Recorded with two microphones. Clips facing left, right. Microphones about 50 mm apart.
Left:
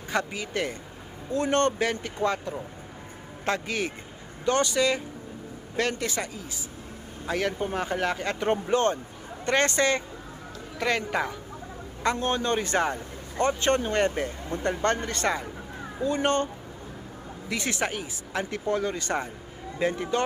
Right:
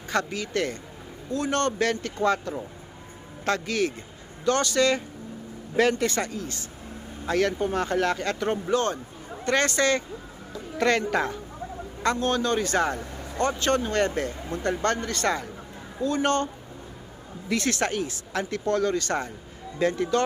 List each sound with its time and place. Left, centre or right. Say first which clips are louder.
0.1 s speech: right 2 dB; centre
3.4 s speech: right 3 dB; centre
10.8 s speech: right 3 dB; centre
12.1 s speech: right 3 dB; left
17.5 s speech: right 3 dB; centre